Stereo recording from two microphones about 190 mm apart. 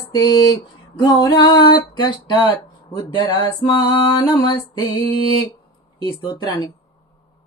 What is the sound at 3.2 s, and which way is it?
Music, 25° left (ahead or behind).